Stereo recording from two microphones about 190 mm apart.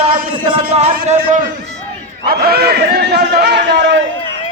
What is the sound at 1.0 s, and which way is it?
Speech, 40° right (ahead or behind).